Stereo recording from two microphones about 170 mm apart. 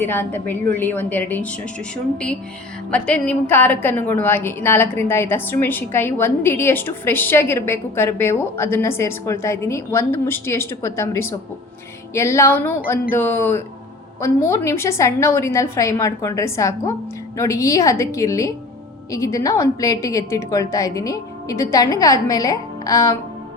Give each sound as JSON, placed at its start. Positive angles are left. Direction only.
{"t": 0.0, "sound": "a woman's voice", "side_deg": 10}
{"t": 2.9, "sound": "a woman's voice", "side_deg": 10}